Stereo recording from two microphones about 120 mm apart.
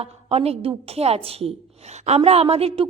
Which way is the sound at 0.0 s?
60° right (ahead or behind).